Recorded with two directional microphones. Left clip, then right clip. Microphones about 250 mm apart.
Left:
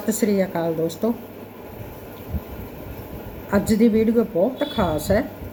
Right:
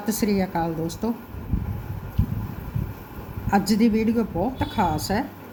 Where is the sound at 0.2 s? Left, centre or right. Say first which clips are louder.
Left 3 dB; right.